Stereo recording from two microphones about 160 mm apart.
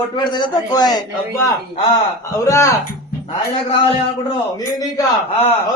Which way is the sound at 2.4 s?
20° left (ahead or behind).